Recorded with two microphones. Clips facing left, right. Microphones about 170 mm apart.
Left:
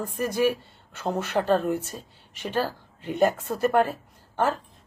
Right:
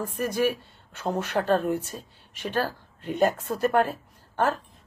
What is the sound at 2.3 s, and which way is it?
Speech, 55° left (ahead or behind).